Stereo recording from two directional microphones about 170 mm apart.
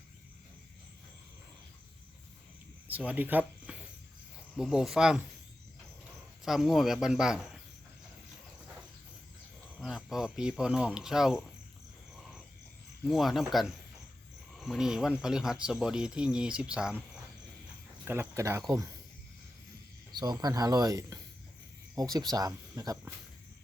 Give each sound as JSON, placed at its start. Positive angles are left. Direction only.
{"t": 2.8, "sound": "speech", "side_deg": -10}
{"t": 6.4, "sound": "speech", "side_deg": 0}
{"t": 9.7, "sound": "speech", "side_deg": 0}
{"t": 13.1, "sound": "speech", "side_deg": 0}
{"t": 18.0, "sound": "speech", "side_deg": -15}
{"t": 20.1, "sound": "speech", "side_deg": -25}